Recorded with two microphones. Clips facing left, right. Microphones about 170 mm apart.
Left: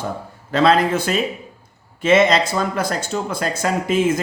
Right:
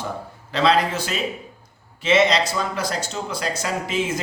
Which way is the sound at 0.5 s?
50° left (ahead or behind).